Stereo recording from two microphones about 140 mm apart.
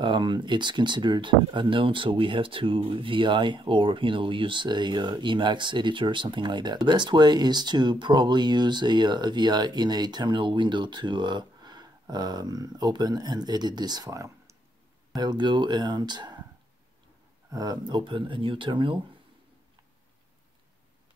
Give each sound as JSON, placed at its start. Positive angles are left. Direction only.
{"t": 0.0, "sound": "speech", "side_deg": -35}
{"t": 17.5, "sound": "speech", "side_deg": -25}